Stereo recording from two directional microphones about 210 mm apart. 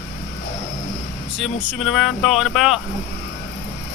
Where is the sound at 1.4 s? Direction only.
Centre (ahead or behind).